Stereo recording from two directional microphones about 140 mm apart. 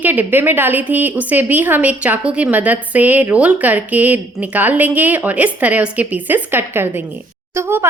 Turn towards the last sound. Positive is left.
turn(degrees=-20)  # may be behind; listen again after turning